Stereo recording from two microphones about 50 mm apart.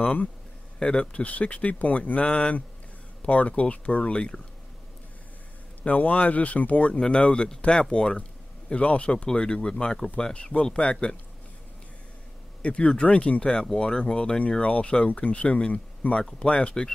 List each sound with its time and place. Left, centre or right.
0.0 s speech: left
5.9 s speech: left
12.6 s speech: left